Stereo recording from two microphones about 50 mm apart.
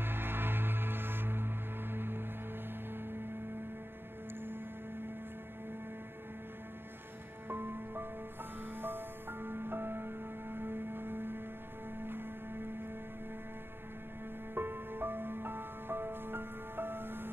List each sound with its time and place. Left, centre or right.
0.0 s music: right
7.4 s music: right
14.5 s music: right